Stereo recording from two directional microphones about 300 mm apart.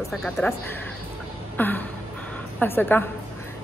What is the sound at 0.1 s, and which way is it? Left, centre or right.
A woman's voice, centre.